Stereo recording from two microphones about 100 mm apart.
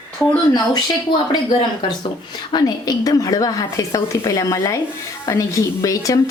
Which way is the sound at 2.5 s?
40° left (ahead or behind).